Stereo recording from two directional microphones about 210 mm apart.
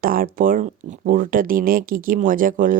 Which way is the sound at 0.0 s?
40° right (ahead or behind).